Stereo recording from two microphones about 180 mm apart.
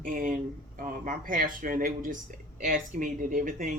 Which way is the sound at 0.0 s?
50° right (ahead or behind).